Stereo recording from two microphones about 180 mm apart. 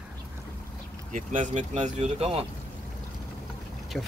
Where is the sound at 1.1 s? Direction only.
45° right (ahead or behind).